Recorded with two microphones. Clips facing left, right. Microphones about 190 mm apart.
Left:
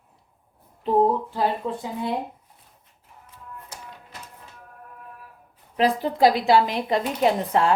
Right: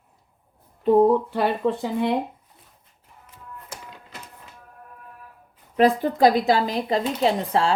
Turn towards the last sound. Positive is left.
turn(degrees=-30)  # may be behind; listen again after turning